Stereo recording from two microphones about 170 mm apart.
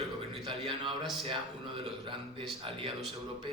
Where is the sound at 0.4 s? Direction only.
30° right (ahead or behind).